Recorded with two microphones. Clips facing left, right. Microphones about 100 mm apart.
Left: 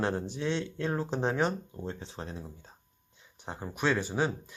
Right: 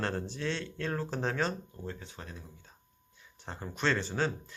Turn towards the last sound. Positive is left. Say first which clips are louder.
# left 2 dB
turn(degrees=15)  # may be behind; listen again after turning